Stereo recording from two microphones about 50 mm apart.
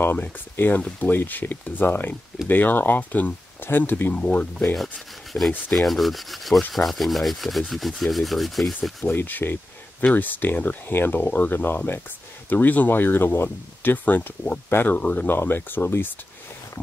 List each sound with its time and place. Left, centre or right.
0.6 s speech: left
4.1 s speech: left
5.7 s rub: centre
9.0 s speech: left
10.9 s speech: left
15.2 s speech: left